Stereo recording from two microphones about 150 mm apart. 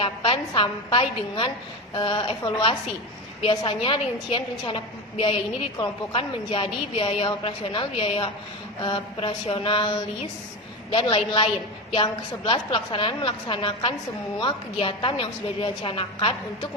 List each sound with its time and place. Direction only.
0.0 s a woman's voice: 35° left (ahead or behind)